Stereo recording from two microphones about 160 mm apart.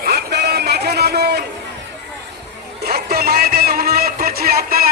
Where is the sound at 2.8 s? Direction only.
70° right (ahead or behind).